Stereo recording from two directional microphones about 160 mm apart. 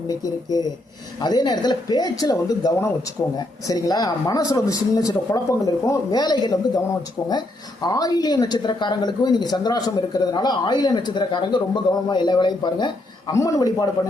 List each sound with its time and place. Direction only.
0.1 s speech: 25° left (ahead or behind)